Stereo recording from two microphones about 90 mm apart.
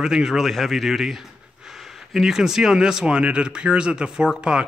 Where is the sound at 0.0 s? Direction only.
5° right (ahead or behind).